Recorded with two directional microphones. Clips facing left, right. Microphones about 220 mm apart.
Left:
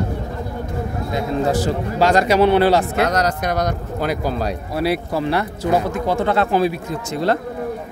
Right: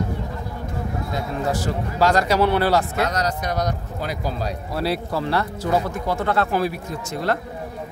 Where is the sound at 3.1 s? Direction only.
75° left (ahead or behind).